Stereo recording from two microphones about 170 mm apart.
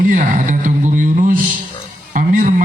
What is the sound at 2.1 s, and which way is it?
Music, 50° right (ahead or behind).